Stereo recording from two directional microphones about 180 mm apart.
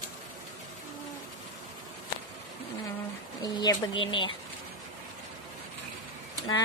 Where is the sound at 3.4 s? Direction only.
25° left (ahead or behind).